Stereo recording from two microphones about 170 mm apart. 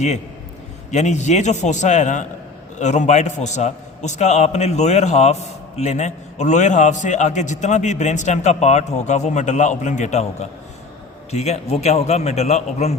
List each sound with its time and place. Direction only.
0.9 s a man's voice: 45° left (ahead or behind)